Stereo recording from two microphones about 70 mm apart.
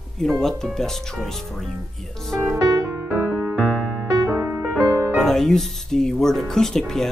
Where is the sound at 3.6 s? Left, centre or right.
Centre.